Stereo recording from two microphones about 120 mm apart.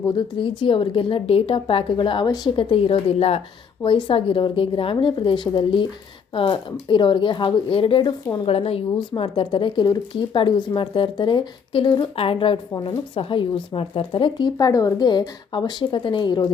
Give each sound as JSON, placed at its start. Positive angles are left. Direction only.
{"t": 0.2, "sound": "speech", "side_deg": 45}
{"t": 3.8, "sound": "a woman's voice", "side_deg": 45}